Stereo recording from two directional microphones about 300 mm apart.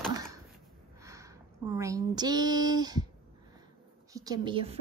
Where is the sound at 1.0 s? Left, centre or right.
Centre.